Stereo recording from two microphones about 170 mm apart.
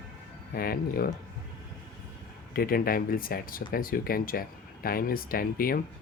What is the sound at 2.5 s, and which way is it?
Speech, 60° left (ahead or behind).